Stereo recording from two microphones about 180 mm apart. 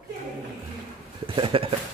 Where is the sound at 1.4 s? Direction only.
30° right (ahead or behind).